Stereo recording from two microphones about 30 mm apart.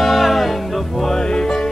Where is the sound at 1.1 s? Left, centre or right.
Centre.